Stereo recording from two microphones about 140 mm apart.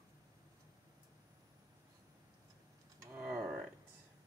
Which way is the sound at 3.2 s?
10° right (ahead or behind).